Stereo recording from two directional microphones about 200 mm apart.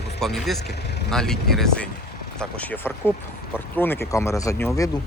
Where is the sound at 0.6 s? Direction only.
55° left (ahead or behind).